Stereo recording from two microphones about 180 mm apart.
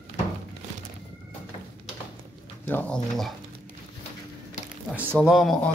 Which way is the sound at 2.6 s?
10° left (ahead or behind).